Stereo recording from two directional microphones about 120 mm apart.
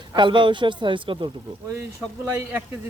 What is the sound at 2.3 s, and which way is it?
Speech, 15° right (ahead or behind).